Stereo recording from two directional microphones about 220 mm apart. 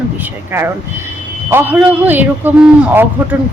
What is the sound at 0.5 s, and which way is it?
Speech, 10° right (ahead or behind).